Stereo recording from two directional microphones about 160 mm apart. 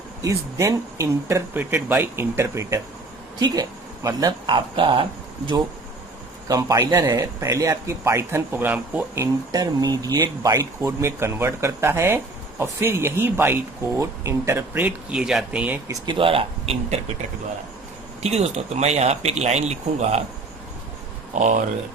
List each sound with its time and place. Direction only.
0.2 s a man's voice: 20° right (ahead or behind)
6.5 s a man's voice: 20° right (ahead or behind)
15.9 s speech: 30° right (ahead or behind)
18.2 s speech: 40° right (ahead or behind)
21.3 s speech: 50° right (ahead or behind)